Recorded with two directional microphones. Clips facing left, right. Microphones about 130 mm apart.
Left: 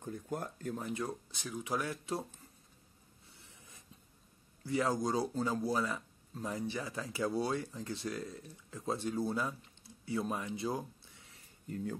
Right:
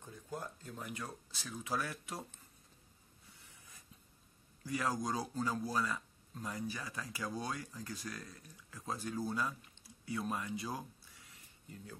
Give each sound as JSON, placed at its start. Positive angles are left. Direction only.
{"t": 0.0, "sound": "speech", "side_deg": 55}
{"t": 0.7, "sound": "speech", "side_deg": 25}
{"t": 3.3, "sound": "a sound", "side_deg": 25}
{"t": 4.6, "sound": "speech", "side_deg": 25}
{"t": 11.7, "sound": "speech", "side_deg": 55}